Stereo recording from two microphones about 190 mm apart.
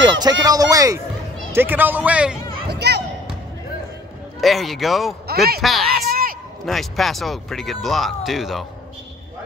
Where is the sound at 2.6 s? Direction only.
60° right (ahead or behind).